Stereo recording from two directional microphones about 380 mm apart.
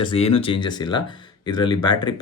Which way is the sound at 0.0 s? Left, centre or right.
Centre.